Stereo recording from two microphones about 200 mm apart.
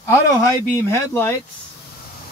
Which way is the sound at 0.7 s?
15° left (ahead or behind).